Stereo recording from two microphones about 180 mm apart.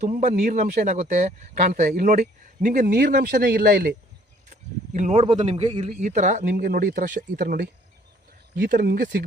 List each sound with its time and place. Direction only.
0.0 s speech: 45° right (ahead or behind); by 3.9 s 60° right (ahead or behind)
4.9 s a man's voice: 40° right (ahead or behind)
5.9 s speech: 45° right (ahead or behind)